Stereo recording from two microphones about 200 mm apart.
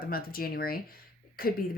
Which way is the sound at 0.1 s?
50° left (ahead or behind).